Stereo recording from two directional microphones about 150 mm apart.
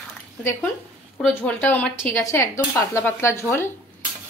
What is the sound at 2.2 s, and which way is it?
A woman's voice, 20° left (ahead or behind).